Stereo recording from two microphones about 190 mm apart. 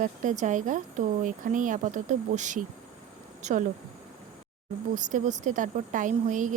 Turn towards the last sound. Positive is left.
turn(degrees=-40)  # may be behind; listen again after turning